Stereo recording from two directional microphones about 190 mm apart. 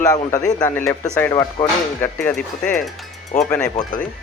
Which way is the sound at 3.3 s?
45° left (ahead or behind).